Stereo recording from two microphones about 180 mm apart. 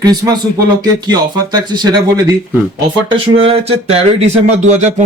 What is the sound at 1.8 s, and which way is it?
Speech, 20° right (ahead or behind).